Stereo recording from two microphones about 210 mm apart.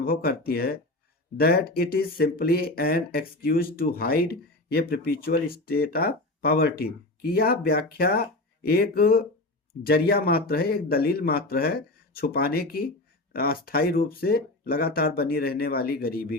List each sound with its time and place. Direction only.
0.0 s speech: 45° left (ahead or behind)